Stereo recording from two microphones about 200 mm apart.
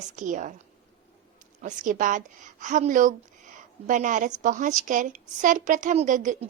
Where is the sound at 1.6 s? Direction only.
40° right (ahead or behind).